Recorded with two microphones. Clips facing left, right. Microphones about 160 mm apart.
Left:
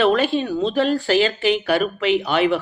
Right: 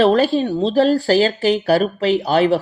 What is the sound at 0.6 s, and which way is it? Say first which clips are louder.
Speech: right 5 dB; 40° right (ahead or behind).